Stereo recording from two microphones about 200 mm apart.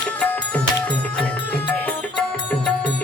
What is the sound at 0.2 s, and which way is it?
Music, 5° left (ahead or behind).